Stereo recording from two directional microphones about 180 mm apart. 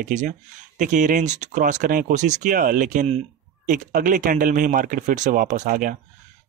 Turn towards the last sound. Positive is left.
turn(degrees=-50)  # may be behind; listen again after turning